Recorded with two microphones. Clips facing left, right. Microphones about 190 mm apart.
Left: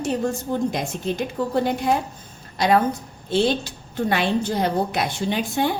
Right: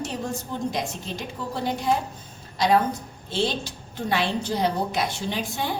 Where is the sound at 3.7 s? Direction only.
55° left (ahead or behind).